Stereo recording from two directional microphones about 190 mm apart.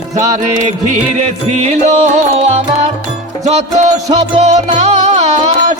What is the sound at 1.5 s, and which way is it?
Music, 35° right (ahead or behind).